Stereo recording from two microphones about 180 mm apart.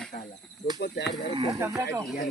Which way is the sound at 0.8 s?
65° left (ahead or behind).